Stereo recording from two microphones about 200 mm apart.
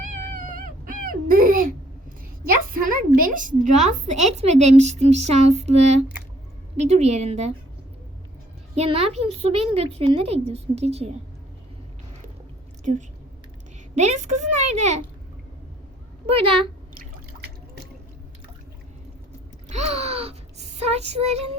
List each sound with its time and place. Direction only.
0.0 s cat: 45° right (ahead or behind)
1.0 s speech: 45° right (ahead or behind)
2.8 s a woman's voice: 40° right (ahead or behind)
8.7 s a woman's voice: 30° right (ahead or behind)
12.8 s a woman's voice: 40° right (ahead or behind)
16.3 s speech: 25° right (ahead or behind)
19.6 s music: 35° right (ahead or behind)